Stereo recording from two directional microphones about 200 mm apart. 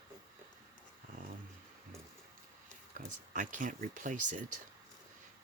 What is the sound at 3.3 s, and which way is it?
Speech, 40° right (ahead or behind).